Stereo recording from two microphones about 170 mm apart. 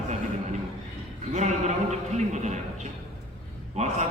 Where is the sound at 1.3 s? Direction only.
45° right (ahead or behind).